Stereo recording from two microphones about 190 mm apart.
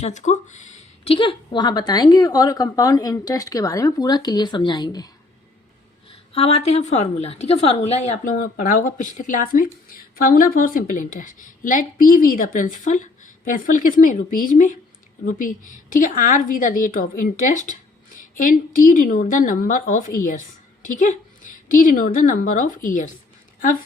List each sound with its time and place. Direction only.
0.0 s speech: 40° left (ahead or behind); by 5.1 s 20° left (ahead or behind)
6.3 s a woman's voice: 30° left (ahead or behind)